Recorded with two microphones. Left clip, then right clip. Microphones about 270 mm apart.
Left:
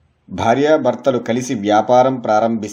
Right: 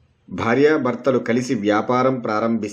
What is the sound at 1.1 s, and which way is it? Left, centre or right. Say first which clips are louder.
Speech: left 1 dB; centre.